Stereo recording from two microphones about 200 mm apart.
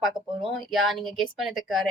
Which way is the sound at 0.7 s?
Centre (ahead or behind).